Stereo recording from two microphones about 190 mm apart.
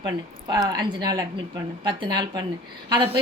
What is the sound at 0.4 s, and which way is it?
A woman's voice, 20° right (ahead or behind).